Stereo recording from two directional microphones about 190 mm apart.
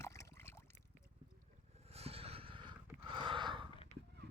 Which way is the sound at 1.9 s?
30° right (ahead or behind).